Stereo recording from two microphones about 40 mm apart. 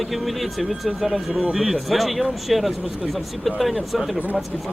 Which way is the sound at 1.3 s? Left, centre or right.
Right.